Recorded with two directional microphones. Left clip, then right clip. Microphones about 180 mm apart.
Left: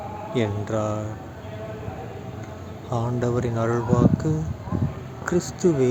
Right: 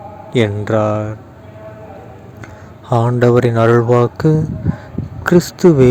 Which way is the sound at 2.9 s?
50° right (ahead or behind).